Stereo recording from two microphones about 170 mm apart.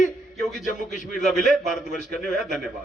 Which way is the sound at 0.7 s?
50° left (ahead or behind).